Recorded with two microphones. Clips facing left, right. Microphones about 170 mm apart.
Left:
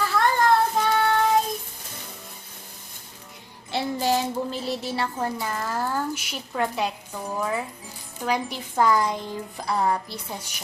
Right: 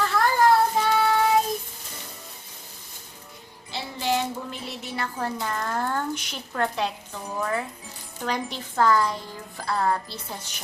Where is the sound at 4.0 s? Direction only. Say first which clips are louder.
Even; 35° left (ahead or behind).